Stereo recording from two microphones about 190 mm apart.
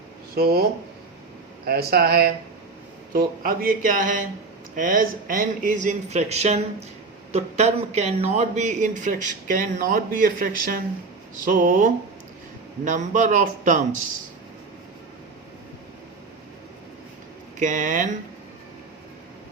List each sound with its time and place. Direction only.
0.3 s speech: 55° right (ahead or behind)
1.6 s speech: 55° right (ahead or behind)
17.6 s speech: 40° right (ahead or behind)